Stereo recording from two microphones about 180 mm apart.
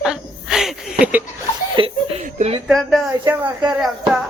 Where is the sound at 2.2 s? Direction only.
40° right (ahead or behind).